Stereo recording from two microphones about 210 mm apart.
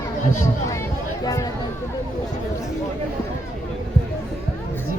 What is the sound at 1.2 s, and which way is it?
Speech, 15° left (ahead or behind).